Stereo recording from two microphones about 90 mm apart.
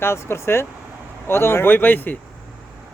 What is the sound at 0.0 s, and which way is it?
Speech, 30° left (ahead or behind).